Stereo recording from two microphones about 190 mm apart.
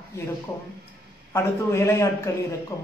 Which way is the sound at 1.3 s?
15° left (ahead or behind).